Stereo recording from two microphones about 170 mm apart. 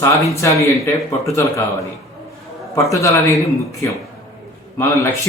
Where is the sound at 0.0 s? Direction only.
15° left (ahead or behind).